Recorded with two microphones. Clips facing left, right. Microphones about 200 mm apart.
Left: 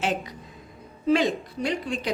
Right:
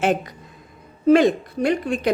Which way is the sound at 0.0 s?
50° right (ahead or behind).